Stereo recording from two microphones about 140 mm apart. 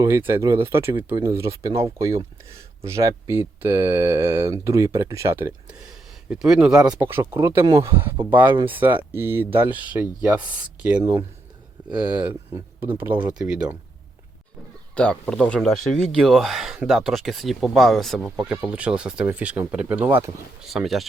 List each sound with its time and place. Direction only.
0.0 s speech: 20° right (ahead or behind)
5.9 s speech: 5° right (ahead or behind)
14.9 s speech: 5° left (ahead or behind); by 20.3 s 15° right (ahead or behind)
20.7 s speech: centre (ahead or behind)